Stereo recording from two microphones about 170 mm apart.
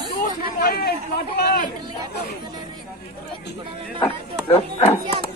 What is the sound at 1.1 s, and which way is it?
Speech, 70° left (ahead or behind).